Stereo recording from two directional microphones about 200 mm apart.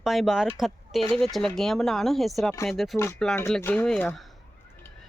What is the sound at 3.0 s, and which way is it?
Speech, 10° left (ahead or behind).